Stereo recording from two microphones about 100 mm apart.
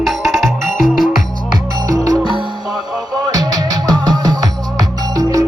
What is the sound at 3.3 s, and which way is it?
Music, 40° right (ahead or behind).